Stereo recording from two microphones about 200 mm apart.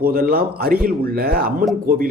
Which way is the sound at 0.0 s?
45° right (ahead or behind).